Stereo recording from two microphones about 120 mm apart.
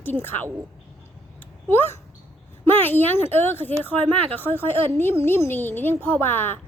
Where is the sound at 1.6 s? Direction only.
15° left (ahead or behind).